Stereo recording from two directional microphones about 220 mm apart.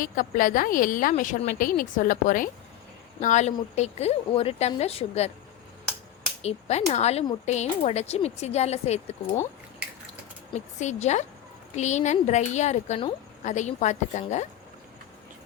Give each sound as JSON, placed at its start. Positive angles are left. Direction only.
{"t": 0.0, "sound": "a woman's voice", "side_deg": 40}
{"t": 6.4, "sound": "speech", "side_deg": 30}
{"t": 10.5, "sound": "a woman's voice", "side_deg": 30}